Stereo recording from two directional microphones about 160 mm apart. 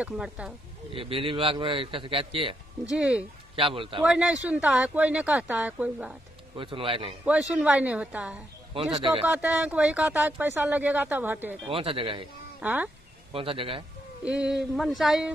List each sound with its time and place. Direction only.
0.0 s a sound: 5° right (ahead or behind)
0.9 s a man's voice: 35° right (ahead or behind)
2.8 s speech: 5° right (ahead or behind)
3.5 s a man's voice: 35° right (ahead or behind)
4.0 s speech: 5° right (ahead or behind)
6.5 s a man's voice: 35° right (ahead or behind)
7.5 s speech: 5° right (ahead or behind)
8.9 s a man's voice: 35° right (ahead or behind)
9.2 s speech: 10° right (ahead or behind)
11.6 s a man's voice: 35° right (ahead or behind)
12.5 s speech: 10° right (ahead or behind)
13.3 s a man's voice: 35° right (ahead or behind)
14.2 s a sound: 5° right (ahead or behind)